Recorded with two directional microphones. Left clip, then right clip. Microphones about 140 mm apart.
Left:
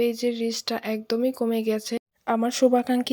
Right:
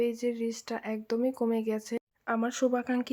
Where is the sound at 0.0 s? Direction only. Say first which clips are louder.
Left 6 dB; 25° left (ahead or behind).